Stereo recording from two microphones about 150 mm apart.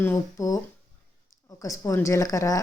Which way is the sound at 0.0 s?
20° left (ahead or behind).